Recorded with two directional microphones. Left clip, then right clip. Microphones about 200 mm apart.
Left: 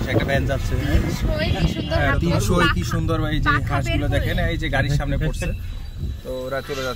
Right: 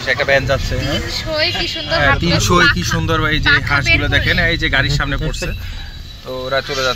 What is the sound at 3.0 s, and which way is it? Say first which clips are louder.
Speech: right 8 dB; 10° right (ahead or behind).